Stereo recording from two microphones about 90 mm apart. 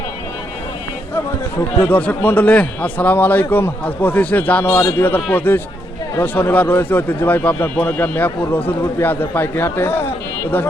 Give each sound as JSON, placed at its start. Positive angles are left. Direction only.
{"t": 1.8, "sound": "speech", "side_deg": 15}